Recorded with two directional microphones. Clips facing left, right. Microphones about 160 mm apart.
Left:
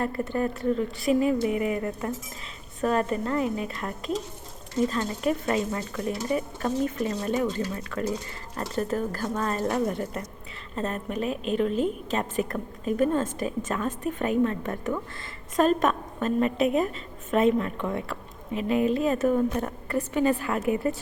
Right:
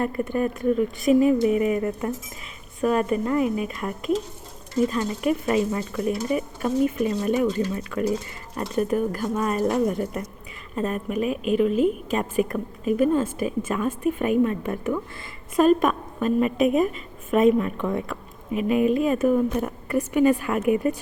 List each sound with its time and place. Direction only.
0.0 s a woman's voice: 15° right (ahead or behind)